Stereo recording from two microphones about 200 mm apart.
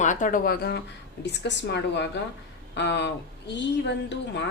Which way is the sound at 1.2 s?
60° left (ahead or behind).